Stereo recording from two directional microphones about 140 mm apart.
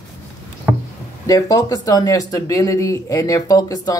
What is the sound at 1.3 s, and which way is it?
Speech, 25° left (ahead or behind).